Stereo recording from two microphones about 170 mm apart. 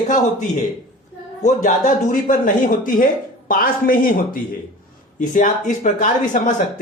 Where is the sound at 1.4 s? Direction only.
50° left (ahead or behind).